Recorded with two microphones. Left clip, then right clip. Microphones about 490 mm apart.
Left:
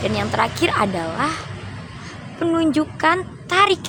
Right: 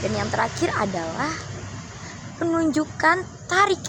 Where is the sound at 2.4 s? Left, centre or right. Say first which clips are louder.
Left 3 dB; right.